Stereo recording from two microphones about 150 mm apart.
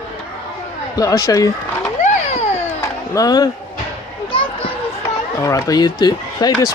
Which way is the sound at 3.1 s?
25° left (ahead or behind).